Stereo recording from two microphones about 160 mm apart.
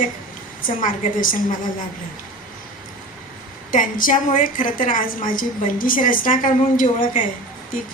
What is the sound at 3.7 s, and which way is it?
A woman's voice, 55° left (ahead or behind).